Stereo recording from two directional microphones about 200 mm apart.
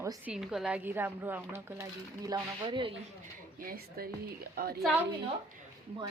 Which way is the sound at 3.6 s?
50° right (ahead or behind).